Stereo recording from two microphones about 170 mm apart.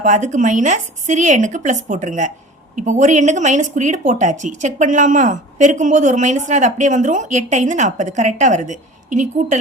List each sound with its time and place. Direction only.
0.0 s speech: 45° right (ahead or behind)